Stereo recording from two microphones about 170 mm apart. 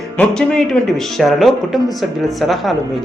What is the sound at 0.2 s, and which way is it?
Speech, 5° left (ahead or behind).